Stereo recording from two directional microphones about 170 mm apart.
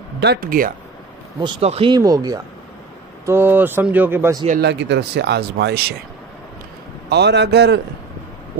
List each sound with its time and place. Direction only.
0.2 s speech: 65° right (ahead or behind)
1.4 s speech: 30° right (ahead or behind)
2.0 s speech: 20° right (ahead or behind)
4.6 s speech: 85° right
7.1 s speech: 85° right